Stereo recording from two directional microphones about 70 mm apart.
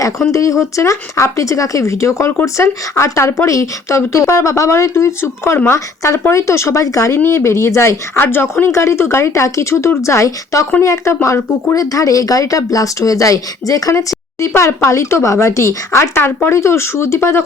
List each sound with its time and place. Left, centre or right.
0.3 s speech: left
14.4 s speech: left
14.8 s speech: left
16.1 s speech: left